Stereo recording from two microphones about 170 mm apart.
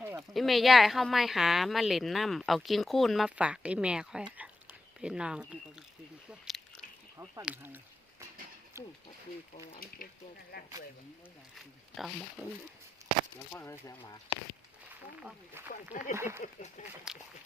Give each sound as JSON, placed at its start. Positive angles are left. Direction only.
{"t": 0.2, "sound": "speech", "side_deg": 0}
{"t": 6.4, "sound": "biting", "side_deg": 0}
{"t": 7.4, "sound": "speech", "side_deg": -10}
{"t": 10.0, "sound": "speech", "side_deg": 55}
{"t": 11.5, "sound": "speech", "side_deg": 0}
{"t": 13.5, "sound": "speech", "side_deg": 15}
{"t": 15.7, "sound": "speech", "side_deg": 50}
{"t": 16.1, "sound": "speech", "side_deg": -15}
{"t": 16.4, "sound": "speech", "side_deg": 45}
{"t": 17.1, "sound": "speech", "side_deg": -5}